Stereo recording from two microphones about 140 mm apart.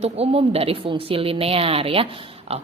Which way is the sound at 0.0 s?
45° right (ahead or behind).